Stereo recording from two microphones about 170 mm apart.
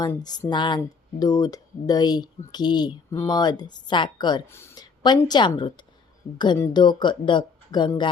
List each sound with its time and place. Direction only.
0.0 s speech: 25° left (ahead or behind)
4.4 s speech: 15° left (ahead or behind)
5.0 s speech: 25° left (ahead or behind)